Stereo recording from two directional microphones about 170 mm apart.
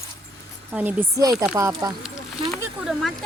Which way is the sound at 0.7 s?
10° right (ahead or behind).